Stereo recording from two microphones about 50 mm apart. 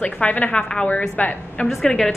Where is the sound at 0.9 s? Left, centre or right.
Left.